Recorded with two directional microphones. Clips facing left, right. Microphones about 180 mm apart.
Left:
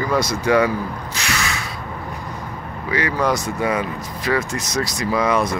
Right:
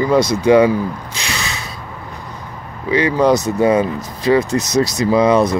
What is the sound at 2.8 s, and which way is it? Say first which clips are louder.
Speech: right 7 dB; 25° right (ahead or behind).